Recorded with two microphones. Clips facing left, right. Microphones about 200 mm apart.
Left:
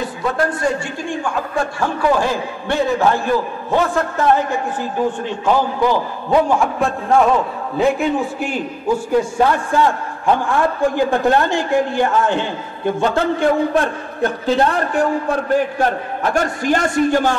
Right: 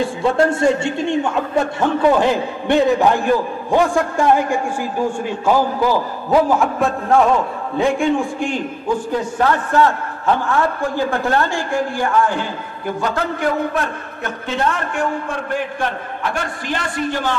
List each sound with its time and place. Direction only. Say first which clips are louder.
0.0 s a man's voice: right 4 dB; 25° right (ahead or behind)
5.8 s a man's voice: even; 5° right (ahead or behind); by 17.4 s 45° left (ahead or behind)